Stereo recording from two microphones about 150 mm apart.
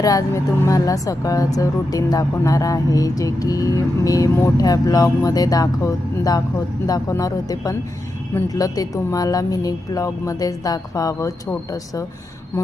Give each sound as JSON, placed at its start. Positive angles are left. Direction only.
{"t": 0.0, "sound": "speech", "side_deg": 25}